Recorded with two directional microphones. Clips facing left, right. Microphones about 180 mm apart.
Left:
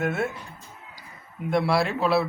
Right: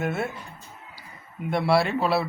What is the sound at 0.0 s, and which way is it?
Speech, centre (ahead or behind).